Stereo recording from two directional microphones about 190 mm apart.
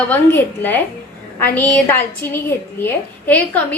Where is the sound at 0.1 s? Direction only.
10° left (ahead or behind).